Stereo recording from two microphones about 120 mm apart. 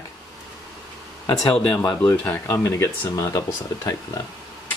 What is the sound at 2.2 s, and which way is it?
Speech, 20° left (ahead or behind).